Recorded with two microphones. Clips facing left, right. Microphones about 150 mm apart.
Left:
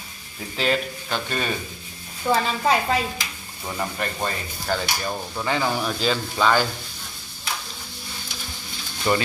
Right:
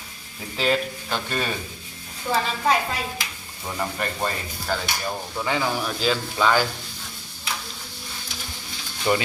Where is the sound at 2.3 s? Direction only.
55° left (ahead or behind).